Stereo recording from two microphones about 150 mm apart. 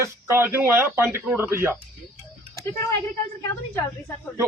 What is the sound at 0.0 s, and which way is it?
Speech, 15° right (ahead or behind).